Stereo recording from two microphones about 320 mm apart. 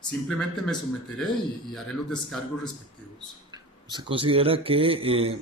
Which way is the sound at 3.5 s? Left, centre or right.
Centre.